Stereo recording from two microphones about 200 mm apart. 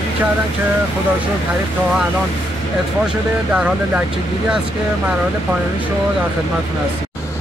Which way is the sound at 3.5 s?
5° right (ahead or behind).